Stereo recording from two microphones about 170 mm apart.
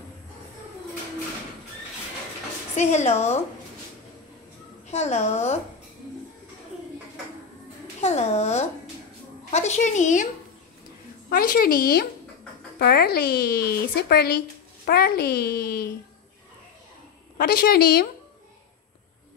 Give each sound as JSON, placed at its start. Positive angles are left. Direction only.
{"t": 2.7, "sound": "a woman's voice", "side_deg": 40}
{"t": 4.9, "sound": "a woman's voice", "side_deg": 40}
{"t": 8.0, "sound": "a woman's voice", "side_deg": 40}
{"t": 11.2, "sound": "speech", "side_deg": 55}
{"t": 17.4, "sound": "speech", "side_deg": 60}